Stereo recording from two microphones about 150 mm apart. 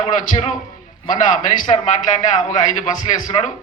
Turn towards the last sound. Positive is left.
turn(degrees=50)  # may be behind; listen again after turning